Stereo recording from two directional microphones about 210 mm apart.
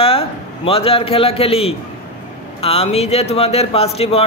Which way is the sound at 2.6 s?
30° left (ahead or behind).